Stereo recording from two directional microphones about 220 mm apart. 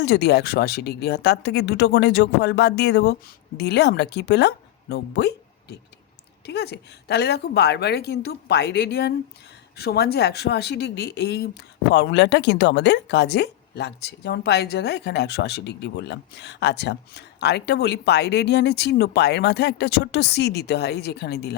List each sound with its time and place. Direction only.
0.0 s speech: 50° left (ahead or behind)